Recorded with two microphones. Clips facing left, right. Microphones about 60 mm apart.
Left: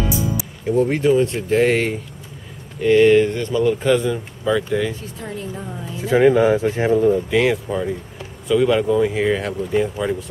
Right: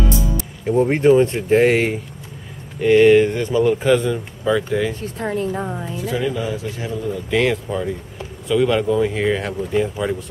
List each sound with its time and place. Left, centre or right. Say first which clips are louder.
0.7 s speech: right 2 dB; right
1.7 s speech: right 1 dB; centre
5.0 s speech: right 7 dB; right
5.9 s speech: left 8 dB; left
6.2 s speech: left 9 dB; left
7.2 s speech: left 1 dB; centre